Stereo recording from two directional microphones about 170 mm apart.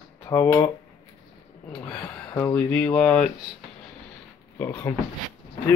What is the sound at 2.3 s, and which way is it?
Speech, 20° left (ahead or behind).